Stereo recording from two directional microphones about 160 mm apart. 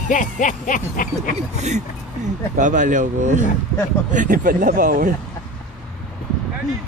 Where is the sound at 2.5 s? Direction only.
50° right (ahead or behind).